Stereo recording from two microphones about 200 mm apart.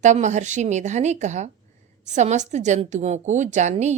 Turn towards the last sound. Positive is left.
turn(degrees=-35)  # may be behind; listen again after turning